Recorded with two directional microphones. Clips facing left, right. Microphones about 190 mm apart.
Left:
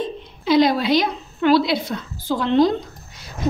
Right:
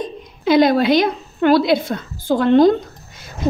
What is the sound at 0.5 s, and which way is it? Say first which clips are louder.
A woman's voice: right 3 dB; 55° right (ahead or behind).